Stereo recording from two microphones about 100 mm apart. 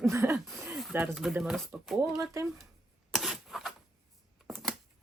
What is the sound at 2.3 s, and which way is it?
Speech, 35° right (ahead or behind).